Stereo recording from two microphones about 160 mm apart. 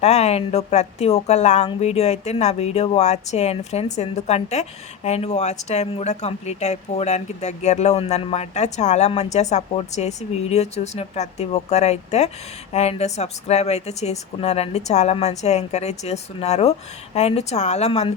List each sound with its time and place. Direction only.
0.0 s speech: 45° left (ahead or behind)